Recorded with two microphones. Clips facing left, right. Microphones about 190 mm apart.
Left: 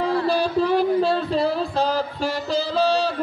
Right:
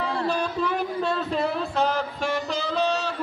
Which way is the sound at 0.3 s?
35° left (ahead or behind).